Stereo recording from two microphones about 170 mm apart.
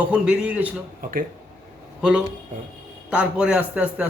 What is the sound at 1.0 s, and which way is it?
Speech, 55° right (ahead or behind).